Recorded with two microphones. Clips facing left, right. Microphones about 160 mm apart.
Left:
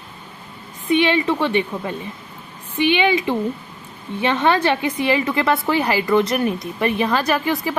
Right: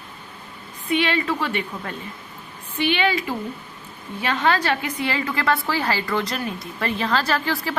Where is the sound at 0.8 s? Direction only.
20° left (ahead or behind).